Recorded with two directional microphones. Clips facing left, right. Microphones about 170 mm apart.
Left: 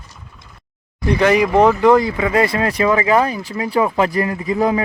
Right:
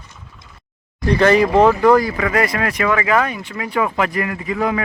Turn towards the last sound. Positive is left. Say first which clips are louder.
# left 3 dB
turn(degrees=35)  # may be behind; listen again after turning